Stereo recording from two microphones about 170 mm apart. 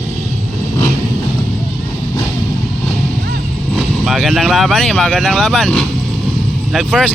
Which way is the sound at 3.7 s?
Centre (ahead or behind).